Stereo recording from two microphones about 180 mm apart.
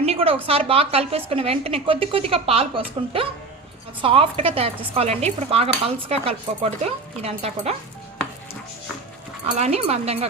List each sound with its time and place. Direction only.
0.0 s a sound: 35° right (ahead or behind)
0.4 s speech: 35° right (ahead or behind)
9.6 s speech: 35° right (ahead or behind)